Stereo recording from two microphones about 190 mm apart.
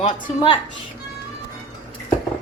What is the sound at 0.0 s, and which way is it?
Speech, 25° left (ahead or behind).